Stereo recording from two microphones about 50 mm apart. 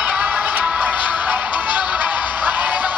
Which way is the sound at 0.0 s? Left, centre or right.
Right.